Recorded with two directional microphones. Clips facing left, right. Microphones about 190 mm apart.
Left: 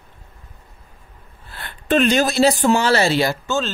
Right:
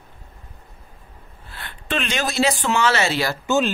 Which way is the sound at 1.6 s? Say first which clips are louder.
Left 10 dB; 40° left (ahead or behind).